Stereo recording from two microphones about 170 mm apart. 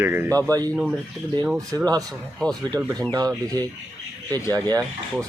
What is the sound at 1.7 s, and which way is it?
Speech, 20° right (ahead or behind).